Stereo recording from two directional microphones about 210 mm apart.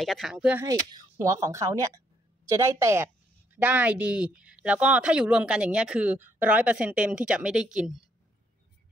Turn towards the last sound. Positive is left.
turn(degrees=0)  # may be behind; listen again after turning